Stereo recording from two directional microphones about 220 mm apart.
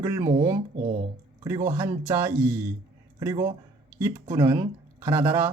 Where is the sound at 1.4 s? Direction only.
15° right (ahead or behind).